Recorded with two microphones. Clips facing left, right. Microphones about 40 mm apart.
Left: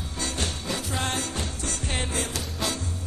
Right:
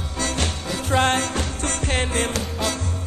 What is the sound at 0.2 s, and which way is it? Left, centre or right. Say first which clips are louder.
Music: right 5 dB; right.